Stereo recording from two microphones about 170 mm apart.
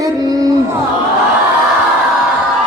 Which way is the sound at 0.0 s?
20° right (ahead or behind).